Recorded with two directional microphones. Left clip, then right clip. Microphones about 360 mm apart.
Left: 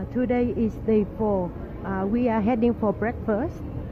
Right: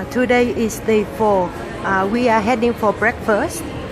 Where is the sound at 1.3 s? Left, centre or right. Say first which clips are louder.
Right 10 dB; centre.